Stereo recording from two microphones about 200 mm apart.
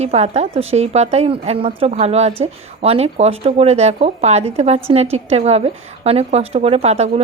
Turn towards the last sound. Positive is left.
turn(degrees=-30)  # may be behind; listen again after turning